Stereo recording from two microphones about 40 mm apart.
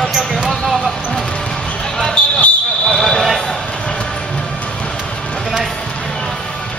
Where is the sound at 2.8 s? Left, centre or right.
Centre.